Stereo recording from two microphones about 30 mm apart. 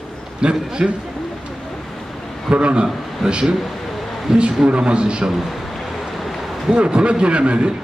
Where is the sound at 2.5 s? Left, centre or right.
Right.